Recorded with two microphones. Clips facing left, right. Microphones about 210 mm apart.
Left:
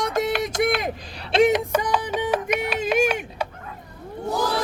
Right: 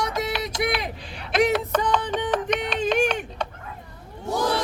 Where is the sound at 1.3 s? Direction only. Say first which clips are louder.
Left 3 dB; 25° left (ahead or behind).